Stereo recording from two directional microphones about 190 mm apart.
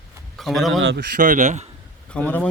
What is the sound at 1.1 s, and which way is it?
Speech, 40° right (ahead or behind).